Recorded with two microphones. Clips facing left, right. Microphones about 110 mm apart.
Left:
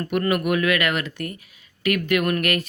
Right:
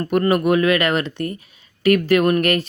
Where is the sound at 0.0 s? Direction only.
35° right (ahead or behind).